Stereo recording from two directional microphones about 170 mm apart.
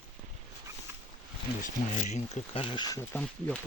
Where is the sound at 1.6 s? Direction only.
45° left (ahead or behind); by 3.0 s 25° left (ahead or behind).